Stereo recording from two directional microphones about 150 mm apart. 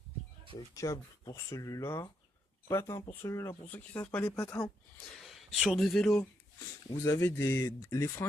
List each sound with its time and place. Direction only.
0.5 s speech: 20° left (ahead or behind)
5.1 s speech: centre (ahead or behind)
7.0 s speech: 15° left (ahead or behind)